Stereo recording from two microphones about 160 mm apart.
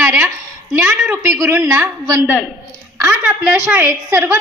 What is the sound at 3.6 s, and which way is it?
Speech, 10° right (ahead or behind).